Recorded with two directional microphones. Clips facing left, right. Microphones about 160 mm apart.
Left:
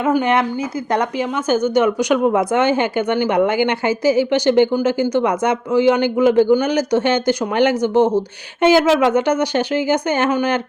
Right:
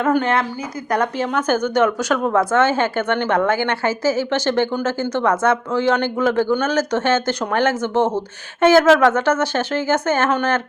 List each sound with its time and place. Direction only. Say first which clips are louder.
0.0 s a woman's voice: left 2 dB; 10° left (ahead or behind)